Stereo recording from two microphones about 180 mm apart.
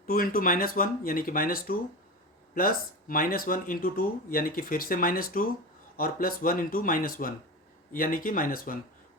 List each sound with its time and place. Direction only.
0.0 s speech: 50° left (ahead or behind)